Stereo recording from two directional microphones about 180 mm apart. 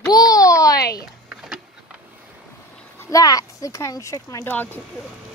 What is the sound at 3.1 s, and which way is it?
Speech, 20° left (ahead or behind).